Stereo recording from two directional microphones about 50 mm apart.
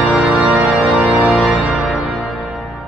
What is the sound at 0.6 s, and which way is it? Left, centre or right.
Organ, right.